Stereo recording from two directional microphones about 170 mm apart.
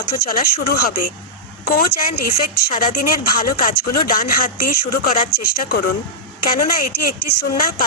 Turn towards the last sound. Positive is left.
turn(degrees=60)  # may be behind; listen again after turning